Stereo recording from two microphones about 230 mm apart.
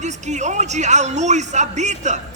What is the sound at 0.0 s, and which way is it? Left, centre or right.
A man's voice, right.